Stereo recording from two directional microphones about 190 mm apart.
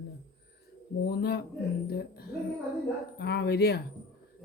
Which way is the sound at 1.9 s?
55° left (ahead or behind).